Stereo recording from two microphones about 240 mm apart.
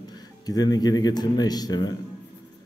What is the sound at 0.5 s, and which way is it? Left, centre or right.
Speech, centre.